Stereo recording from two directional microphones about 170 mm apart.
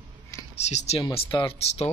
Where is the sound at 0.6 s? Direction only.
40° left (ahead or behind).